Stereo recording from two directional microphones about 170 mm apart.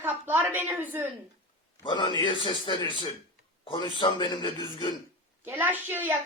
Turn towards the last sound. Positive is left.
turn(degrees=-10)  # may be behind; listen again after turning